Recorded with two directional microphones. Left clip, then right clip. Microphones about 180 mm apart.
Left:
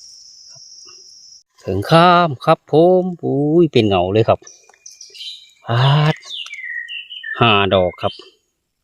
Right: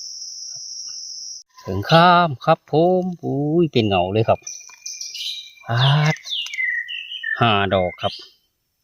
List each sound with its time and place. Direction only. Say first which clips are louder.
1.6 s speech: left 2 dB; 45° left (ahead or behind)
5.6 s speech: left 3 dB; 40° left (ahead or behind)
7.3 s speech: left 5 dB; 40° left (ahead or behind)